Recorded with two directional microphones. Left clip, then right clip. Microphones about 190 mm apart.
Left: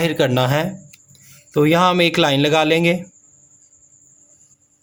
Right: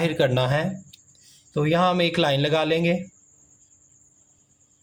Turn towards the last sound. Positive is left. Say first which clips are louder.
# left 6 dB
turn(degrees=35)  # may be behind; listen again after turning